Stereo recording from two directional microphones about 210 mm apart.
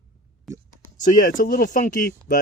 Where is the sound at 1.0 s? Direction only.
40° left (ahead or behind).